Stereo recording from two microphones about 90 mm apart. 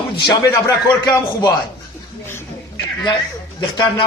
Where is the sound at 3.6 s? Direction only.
60° left (ahead or behind).